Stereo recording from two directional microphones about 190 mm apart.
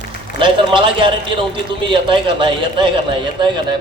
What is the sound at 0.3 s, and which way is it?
A man's voice, 25° right (ahead or behind).